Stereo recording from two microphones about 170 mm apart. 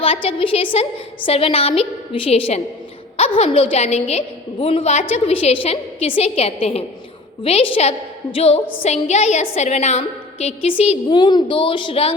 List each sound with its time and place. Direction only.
0.0 s a woman's voice: 30° left (ahead or behind)